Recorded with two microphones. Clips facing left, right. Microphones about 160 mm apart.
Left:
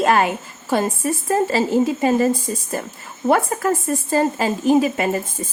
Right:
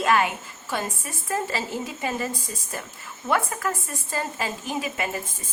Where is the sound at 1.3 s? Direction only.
35° left (ahead or behind).